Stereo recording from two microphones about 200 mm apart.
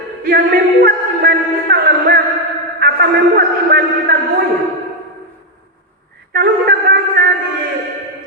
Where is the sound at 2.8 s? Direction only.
50° right (ahead or behind).